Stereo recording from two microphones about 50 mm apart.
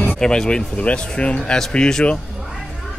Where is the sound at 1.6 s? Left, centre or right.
Centre.